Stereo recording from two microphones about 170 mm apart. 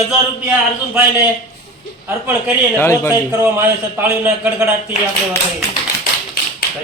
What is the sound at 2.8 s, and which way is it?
Speech, 15° left (ahead or behind).